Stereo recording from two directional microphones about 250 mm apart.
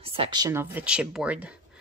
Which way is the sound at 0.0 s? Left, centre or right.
Right.